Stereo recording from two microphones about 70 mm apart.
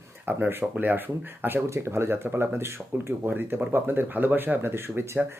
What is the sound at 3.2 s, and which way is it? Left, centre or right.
Speech, right.